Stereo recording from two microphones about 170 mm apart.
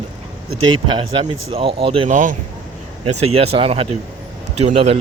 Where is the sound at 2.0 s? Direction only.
50° right (ahead or behind).